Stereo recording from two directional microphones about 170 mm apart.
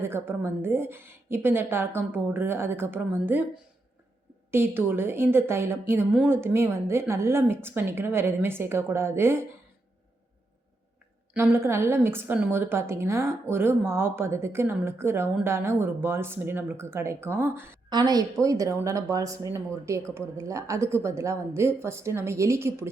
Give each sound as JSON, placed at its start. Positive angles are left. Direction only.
{"t": 0.0, "sound": "a woman's voice", "side_deg": -15}
{"t": 11.3, "sound": "a woman's voice", "side_deg": -15}
{"t": 17.8, "sound": "a woman's voice", "side_deg": -25}